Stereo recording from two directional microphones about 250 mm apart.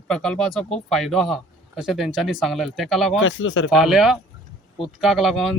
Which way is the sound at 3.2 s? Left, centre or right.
Left.